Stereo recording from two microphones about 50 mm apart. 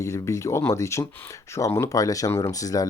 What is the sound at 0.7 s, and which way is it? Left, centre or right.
Speech, left.